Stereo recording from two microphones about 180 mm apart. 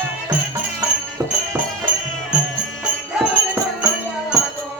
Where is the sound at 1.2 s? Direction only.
20° right (ahead or behind).